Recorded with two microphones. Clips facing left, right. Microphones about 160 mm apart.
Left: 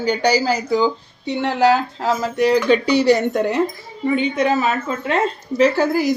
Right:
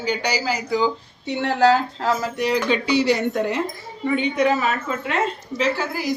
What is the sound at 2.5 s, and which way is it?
Speech, 40° left (ahead or behind).